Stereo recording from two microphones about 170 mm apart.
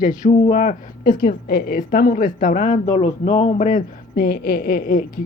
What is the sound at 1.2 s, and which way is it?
A woman's voice, 65° left (ahead or behind).